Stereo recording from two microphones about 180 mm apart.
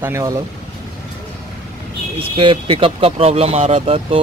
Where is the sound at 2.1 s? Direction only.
30° right (ahead or behind).